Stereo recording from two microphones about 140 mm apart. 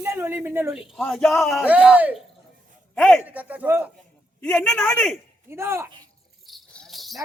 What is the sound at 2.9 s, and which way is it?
Speech, 5° left (ahead or behind).